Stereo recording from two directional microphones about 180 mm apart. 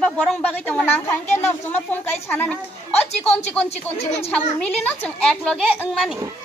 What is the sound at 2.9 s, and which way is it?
Speech, 35° left (ahead or behind).